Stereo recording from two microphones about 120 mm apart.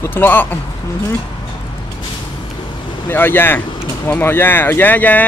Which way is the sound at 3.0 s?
15° left (ahead or behind).